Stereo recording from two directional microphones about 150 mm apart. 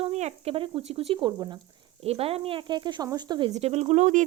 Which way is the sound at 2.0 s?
40° right (ahead or behind).